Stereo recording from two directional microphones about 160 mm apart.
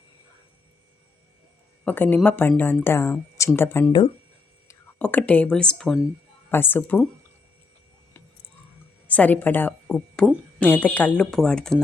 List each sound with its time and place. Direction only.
1.8 s speech: 10° left (ahead or behind)
9.0 s speech: 10° left (ahead or behind)
9.8 s a sound: 5° left (ahead or behind)
10.6 s speech: 10° left (ahead or behind)